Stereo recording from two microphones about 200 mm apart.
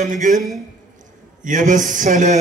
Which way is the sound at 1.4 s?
40° right (ahead or behind).